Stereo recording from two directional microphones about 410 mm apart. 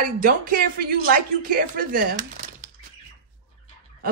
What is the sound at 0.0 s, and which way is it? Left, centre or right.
A woman's voice, right.